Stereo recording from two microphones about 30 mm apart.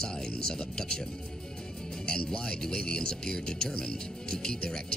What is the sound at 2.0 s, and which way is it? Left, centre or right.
Speech, left.